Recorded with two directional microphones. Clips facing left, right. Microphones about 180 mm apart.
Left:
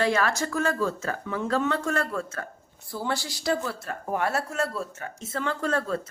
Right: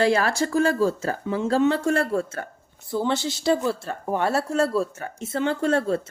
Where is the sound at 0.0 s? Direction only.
30° right (ahead or behind).